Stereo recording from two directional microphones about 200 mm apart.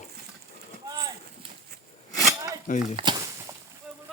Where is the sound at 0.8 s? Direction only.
20° right (ahead or behind).